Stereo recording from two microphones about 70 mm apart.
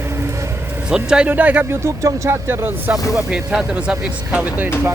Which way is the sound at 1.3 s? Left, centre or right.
Right.